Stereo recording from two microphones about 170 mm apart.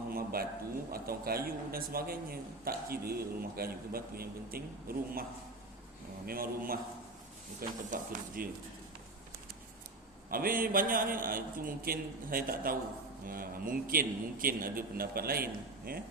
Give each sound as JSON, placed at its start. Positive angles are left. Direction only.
{"t": 0.1, "sound": "a sound", "side_deg": -60}
{"t": 0.9, "sound": "a man's voice", "side_deg": -60}
{"t": 6.2, "sound": "a man's voice", "side_deg": -60}
{"t": 10.2, "sound": "a man's voice", "side_deg": -60}